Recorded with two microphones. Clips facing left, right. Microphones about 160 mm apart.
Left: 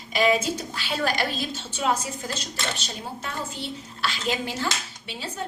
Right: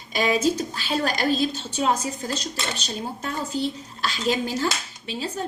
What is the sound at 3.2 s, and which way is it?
A woman's voice, 40° right (ahead or behind).